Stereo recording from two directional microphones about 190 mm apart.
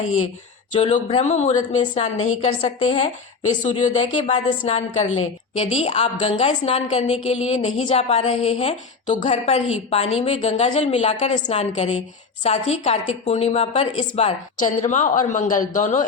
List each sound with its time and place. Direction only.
0.0 s speech: 90° left
0.7 s a woman's voice: 40° left (ahead or behind)